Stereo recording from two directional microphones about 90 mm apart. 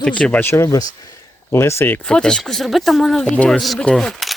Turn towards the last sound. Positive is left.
turn(degrees=5)  # may be behind; listen again after turning